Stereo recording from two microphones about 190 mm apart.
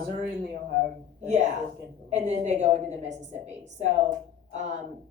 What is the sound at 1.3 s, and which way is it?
A woman's voice, 40° right (ahead or behind).